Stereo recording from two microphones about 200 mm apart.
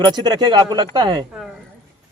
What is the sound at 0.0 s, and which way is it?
Speech, 20° right (ahead or behind).